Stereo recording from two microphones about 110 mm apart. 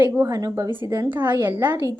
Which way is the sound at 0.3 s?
30° right (ahead or behind).